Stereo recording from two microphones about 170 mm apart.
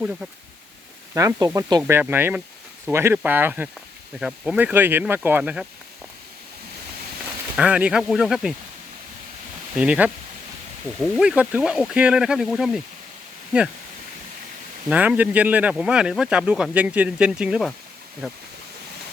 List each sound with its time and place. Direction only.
1.1 s speech: 20° right (ahead or behind)
7.5 s speech: 5° right (ahead or behind)
9.7 s speech: 5° right (ahead or behind)
11.2 s speech: 5° right (ahead or behind)
14.8 s speech: 10° right (ahead or behind)